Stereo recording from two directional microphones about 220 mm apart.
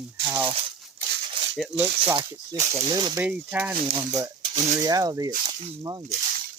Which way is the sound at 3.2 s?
5° right (ahead or behind).